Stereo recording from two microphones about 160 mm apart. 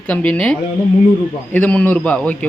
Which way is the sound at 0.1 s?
5° left (ahead or behind).